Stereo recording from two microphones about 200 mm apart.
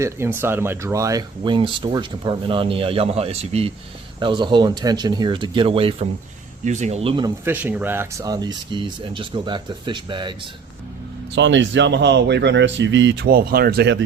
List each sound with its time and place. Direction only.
0.0 s speech: 10° right (ahead or behind); by 7.3 s 25° right (ahead or behind)
7.4 s speech: 10° right (ahead or behind); by 10.5 s 25° right (ahead or behind)
11.3 s speech: 65° right (ahead or behind)